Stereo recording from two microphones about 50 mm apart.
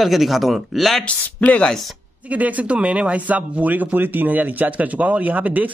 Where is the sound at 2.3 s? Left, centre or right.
Right.